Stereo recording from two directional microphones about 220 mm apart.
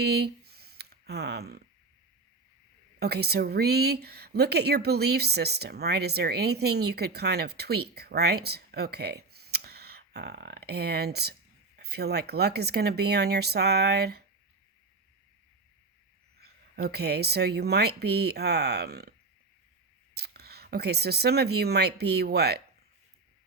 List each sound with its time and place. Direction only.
0.0 s a sound: 45° right (ahead or behind)
3.0 s a woman's voice: 45° right (ahead or behind)
16.4 s a woman's voice: 45° right (ahead or behind)
20.1 s speech: 45° right (ahead or behind)